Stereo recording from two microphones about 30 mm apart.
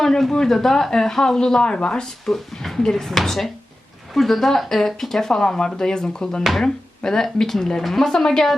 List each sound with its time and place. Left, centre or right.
0.2 s speech: centre
1.6 s speech: left
2.0 s speech: centre
8.1 s speech: left